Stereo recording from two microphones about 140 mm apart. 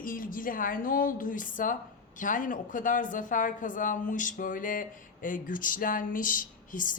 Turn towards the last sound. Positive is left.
turn(degrees=70)  # may be behind; listen again after turning